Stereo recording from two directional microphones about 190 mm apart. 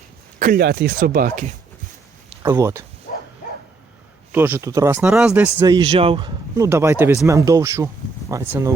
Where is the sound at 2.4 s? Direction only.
15° right (ahead or behind).